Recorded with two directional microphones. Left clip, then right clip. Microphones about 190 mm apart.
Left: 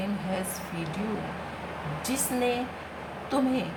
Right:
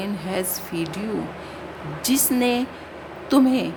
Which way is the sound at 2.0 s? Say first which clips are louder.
Right 7 dB; 55° right (ahead or behind).